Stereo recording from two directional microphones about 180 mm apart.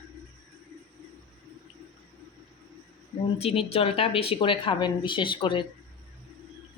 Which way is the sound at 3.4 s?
35° left (ahead or behind).